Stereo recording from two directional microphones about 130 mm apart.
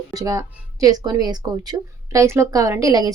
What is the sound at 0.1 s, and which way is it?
Speech, 30° right (ahead or behind).